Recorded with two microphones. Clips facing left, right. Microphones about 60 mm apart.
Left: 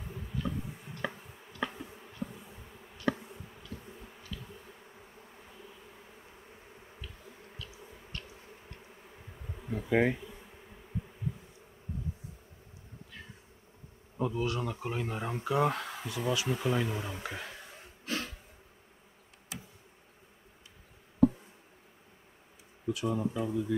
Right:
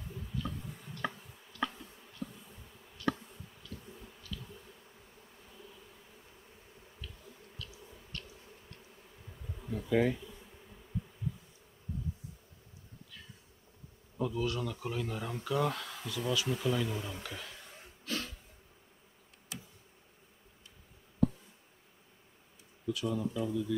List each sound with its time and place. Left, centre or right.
0.0 s insect: left
3.1 s bee: centre
14.1 s speech: left
17.7 s a sound: left
22.8 s speech: left